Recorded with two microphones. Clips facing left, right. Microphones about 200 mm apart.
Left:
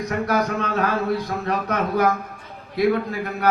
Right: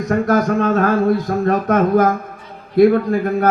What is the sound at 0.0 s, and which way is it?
Speech, 45° right (ahead or behind).